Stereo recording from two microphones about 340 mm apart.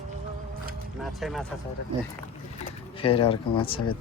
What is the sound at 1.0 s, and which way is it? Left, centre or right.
Speech, centre.